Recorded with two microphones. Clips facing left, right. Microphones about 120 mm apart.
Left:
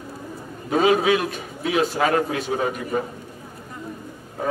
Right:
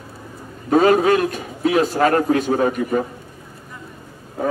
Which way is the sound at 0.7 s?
50° right (ahead or behind).